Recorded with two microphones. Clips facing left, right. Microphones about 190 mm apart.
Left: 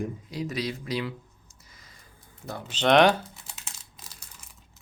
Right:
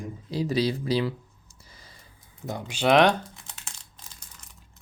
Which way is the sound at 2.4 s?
15° right (ahead or behind).